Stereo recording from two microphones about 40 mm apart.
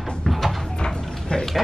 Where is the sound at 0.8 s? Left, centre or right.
Centre.